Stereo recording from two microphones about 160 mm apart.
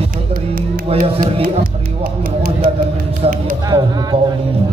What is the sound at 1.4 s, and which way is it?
Speech, 60° right (ahead or behind).